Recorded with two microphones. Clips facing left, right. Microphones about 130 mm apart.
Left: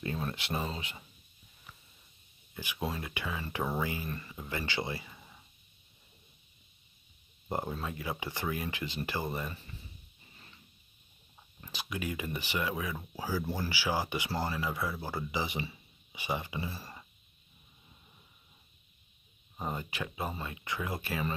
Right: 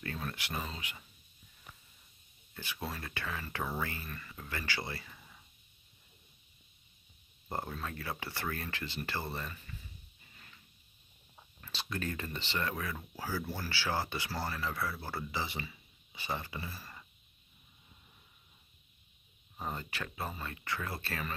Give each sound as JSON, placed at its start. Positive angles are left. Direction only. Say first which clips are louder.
{"t": 0.0, "sound": "speech", "louder": "left 4 dB", "side_deg": 20}
{"t": 2.5, "sound": "speech", "louder": "left 5 dB", "side_deg": 15}
{"t": 4.1, "sound": "speech", "louder": "left 6 dB", "side_deg": 30}
{"t": 4.4, "sound": "speech", "louder": "left 3 dB", "side_deg": 20}
{"t": 7.4, "sound": "speech", "louder": "left 4 dB", "side_deg": 15}
{"t": 9.5, "sound": "a sound", "louder": "left 3 dB", "side_deg": 35}
{"t": 11.6, "sound": "speech", "louder": "left 1 dB", "side_deg": 15}
{"t": 16.7, "sound": "speech", "louder": "left 4 dB", "side_deg": 30}
{"t": 19.5, "sound": "speech", "louder": "left 3 dB", "side_deg": 10}